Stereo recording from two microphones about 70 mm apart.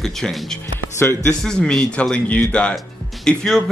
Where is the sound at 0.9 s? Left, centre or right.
Left.